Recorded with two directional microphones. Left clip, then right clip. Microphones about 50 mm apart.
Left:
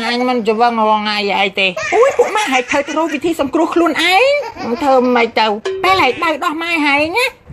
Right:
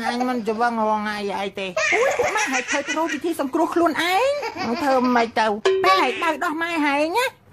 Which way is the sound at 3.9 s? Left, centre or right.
Centre.